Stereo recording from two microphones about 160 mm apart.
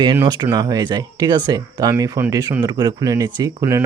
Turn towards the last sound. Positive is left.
turn(degrees=-20)  # may be behind; listen again after turning